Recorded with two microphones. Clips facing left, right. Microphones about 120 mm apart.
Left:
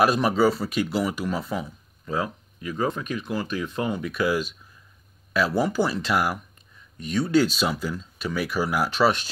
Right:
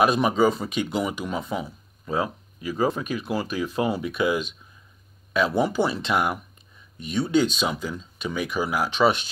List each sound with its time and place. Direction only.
0.0 s speech: centre (ahead or behind)
2.0 s speech: 20° right (ahead or behind)
2.6 s speech: 10° right (ahead or behind)
5.7 s speech: centre (ahead or behind)